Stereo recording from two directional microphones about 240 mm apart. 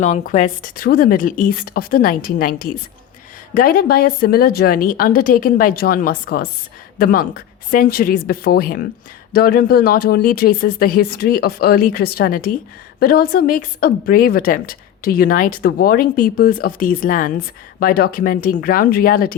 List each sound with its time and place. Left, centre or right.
0.0 s a woman's voice: left